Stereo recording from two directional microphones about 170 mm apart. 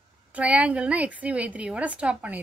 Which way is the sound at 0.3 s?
10° right (ahead or behind).